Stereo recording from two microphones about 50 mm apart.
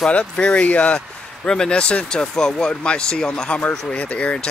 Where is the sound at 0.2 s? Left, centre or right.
Left.